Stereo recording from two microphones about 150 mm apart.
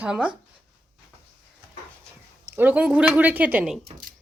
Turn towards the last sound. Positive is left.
turn(degrees=-5)  # may be behind; listen again after turning